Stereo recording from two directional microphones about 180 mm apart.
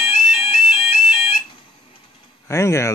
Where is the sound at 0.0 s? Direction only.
30° left (ahead or behind).